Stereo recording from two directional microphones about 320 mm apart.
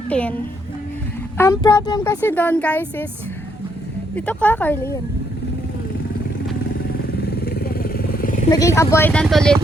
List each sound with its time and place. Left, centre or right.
0.1 s a woman's voice: centre
1.4 s speech: centre
4.1 s a woman's voice: centre
7.2 s vehicle: left
8.4 s speech: centre